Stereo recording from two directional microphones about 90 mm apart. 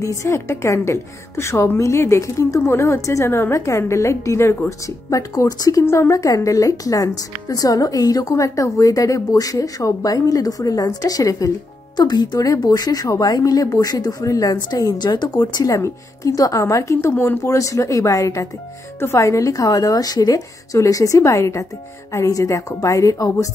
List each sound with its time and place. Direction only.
0.0 s speech: 35° left (ahead or behind); by 15.7 s 55° left (ahead or behind)
15.7 s speech: 35° left (ahead or behind)